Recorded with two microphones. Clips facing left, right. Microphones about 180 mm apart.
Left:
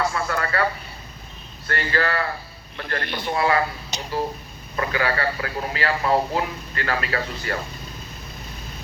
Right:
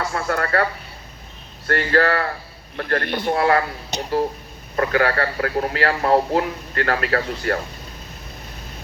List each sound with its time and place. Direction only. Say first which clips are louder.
0.1 s speech: right 3 dB; 50° right (ahead or behind)
1.6 s a man's voice: right 6 dB; 60° right (ahead or behind)